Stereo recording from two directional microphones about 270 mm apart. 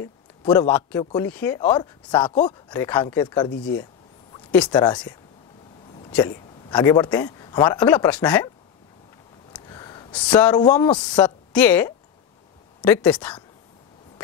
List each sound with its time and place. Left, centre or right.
0.0 s a man's voice: centre
4.6 s speech: centre
6.1 s speech: centre
9.7 s a man's voice: centre